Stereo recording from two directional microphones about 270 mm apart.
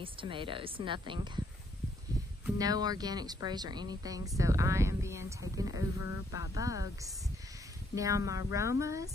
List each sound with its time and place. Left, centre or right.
0.0 s speech: centre
2.4 s speech: centre
7.9 s speech: centre